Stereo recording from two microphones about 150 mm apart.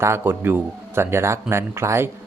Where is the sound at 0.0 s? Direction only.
15° right (ahead or behind).